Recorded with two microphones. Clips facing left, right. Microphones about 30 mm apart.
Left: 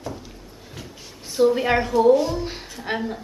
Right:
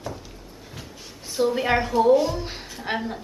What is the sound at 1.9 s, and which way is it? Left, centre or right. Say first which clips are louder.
A woman's voice: left 2 dB; centre.